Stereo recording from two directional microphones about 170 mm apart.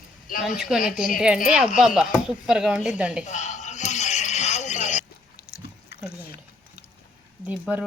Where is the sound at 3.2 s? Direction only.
45° left (ahead or behind).